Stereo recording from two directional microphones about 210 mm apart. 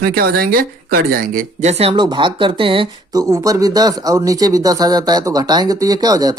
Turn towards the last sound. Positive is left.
turn(degrees=-15)  # may be behind; listen again after turning